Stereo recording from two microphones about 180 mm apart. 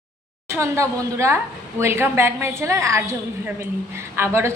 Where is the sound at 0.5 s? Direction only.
15° right (ahead or behind).